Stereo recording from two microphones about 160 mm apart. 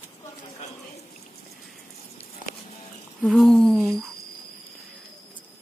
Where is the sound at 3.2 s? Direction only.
Centre (ahead or behind).